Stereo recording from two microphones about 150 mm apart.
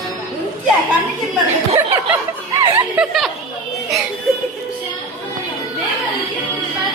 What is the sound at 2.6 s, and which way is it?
Snicker, 15° right (ahead or behind).